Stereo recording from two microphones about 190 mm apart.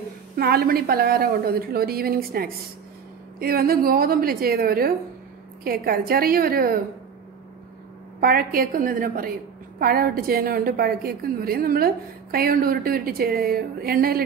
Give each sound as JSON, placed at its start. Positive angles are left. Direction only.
{"t": 0.4, "sound": "a woman's voice", "side_deg": -55}
{"t": 8.2, "sound": "a woman's voice", "side_deg": -50}